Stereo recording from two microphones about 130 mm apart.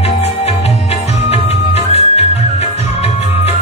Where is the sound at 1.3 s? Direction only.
55° left (ahead or behind).